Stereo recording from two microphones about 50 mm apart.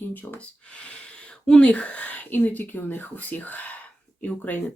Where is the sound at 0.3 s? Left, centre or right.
Left.